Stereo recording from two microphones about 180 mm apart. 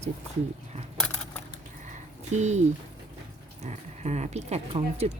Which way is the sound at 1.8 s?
40° right (ahead or behind).